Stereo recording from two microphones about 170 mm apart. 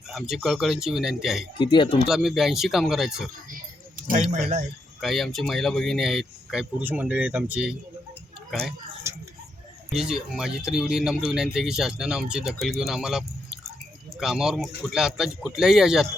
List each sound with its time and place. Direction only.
0.1 s speech: centre (ahead or behind)
1.5 s speech: 30° left (ahead or behind)
2.0 s speech: centre (ahead or behind)
3.9 s speech: 55° right (ahead or behind)
4.9 s speech: centre (ahead or behind)
9.9 s speech: 5° right (ahead or behind)